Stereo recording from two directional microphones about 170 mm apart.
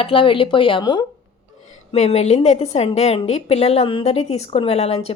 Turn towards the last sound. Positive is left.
turn(degrees=35)  # may be behind; listen again after turning